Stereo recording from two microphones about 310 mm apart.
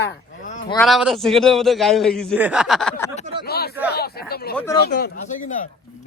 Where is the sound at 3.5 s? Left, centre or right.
Left.